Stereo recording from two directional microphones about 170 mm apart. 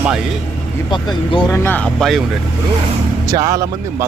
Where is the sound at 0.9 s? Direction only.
25° left (ahead or behind).